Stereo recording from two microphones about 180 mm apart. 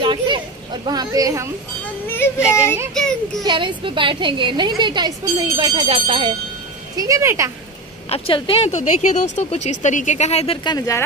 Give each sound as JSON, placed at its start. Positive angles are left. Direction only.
{"t": 0.0, "sound": "a sound", "side_deg": -25}
{"t": 0.8, "sound": "a woman's voice", "side_deg": -20}
{"t": 2.0, "sound": "a sound", "side_deg": 15}
{"t": 2.9, "sound": "a child's voice", "side_deg": 0}
{"t": 3.4, "sound": "a woman's voice", "side_deg": -25}
{"t": 7.0, "sound": "speech", "side_deg": -15}
{"t": 8.1, "sound": "speech", "side_deg": 30}